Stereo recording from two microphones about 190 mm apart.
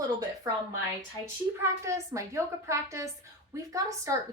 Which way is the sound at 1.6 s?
15° right (ahead or behind).